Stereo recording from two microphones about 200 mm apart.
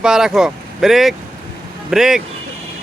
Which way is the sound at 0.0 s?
5° right (ahead or behind).